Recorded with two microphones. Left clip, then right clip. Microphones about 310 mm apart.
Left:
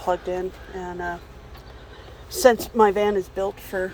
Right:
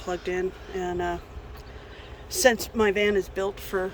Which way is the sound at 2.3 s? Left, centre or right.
Centre.